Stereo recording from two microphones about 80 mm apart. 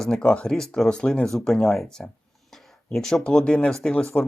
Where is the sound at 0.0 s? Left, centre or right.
Centre.